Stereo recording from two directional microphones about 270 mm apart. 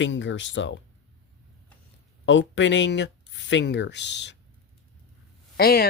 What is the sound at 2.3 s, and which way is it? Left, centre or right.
Speech, left.